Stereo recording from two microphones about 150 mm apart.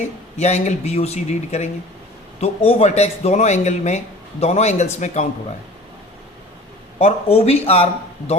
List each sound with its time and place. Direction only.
0.3 s a man's voice: 50° left (ahead or behind)
7.0 s a man's voice: 40° left (ahead or behind)